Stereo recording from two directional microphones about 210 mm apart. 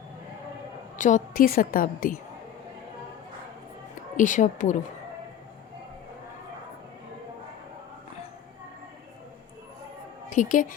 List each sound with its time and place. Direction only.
0.9 s a woman's voice: 35° left (ahead or behind)
4.2 s a woman's voice: 35° left (ahead or behind)
10.2 s a woman's voice: 35° left (ahead or behind)